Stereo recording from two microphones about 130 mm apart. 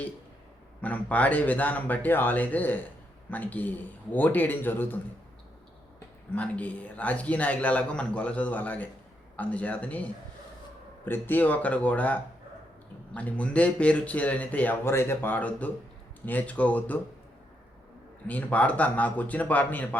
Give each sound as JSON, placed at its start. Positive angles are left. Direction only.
{"t": 0.8, "sound": "a man's voice", "side_deg": 10}
{"t": 6.3, "sound": "a man's voice", "side_deg": 10}
{"t": 18.3, "sound": "a man's voice", "side_deg": 10}